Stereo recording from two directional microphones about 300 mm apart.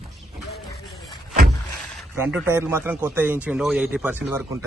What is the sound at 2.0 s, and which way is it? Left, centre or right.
A man's voice, centre.